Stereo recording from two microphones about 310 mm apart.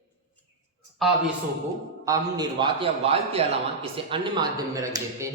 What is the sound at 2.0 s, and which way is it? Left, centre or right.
A man's voice, centre.